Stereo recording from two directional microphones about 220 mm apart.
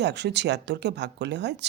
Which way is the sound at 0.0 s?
50° right (ahead or behind).